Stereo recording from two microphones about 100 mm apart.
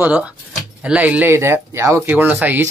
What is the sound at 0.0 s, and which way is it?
Speech, 10° right (ahead or behind).